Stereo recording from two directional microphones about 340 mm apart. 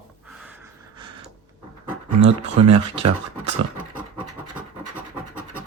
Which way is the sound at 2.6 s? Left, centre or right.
Centre.